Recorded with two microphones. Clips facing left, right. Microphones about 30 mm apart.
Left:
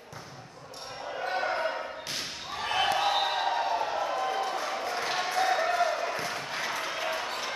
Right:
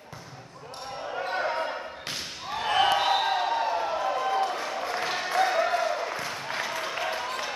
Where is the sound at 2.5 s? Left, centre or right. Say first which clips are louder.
Right 4 dB; centre.